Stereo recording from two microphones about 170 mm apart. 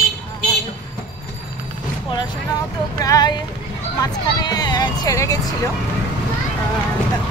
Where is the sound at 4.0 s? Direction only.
25° left (ahead or behind).